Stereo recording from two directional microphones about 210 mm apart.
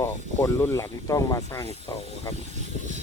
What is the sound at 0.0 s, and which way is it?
Speech, 15° left (ahead or behind).